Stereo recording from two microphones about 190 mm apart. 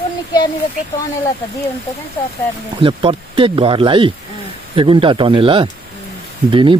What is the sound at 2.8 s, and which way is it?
Speech, 25° right (ahead or behind).